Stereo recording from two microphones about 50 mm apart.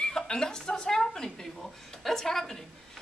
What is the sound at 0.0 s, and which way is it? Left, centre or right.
Speech, centre.